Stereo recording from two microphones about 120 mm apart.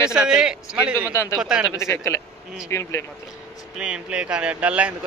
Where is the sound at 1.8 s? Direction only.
25° left (ahead or behind).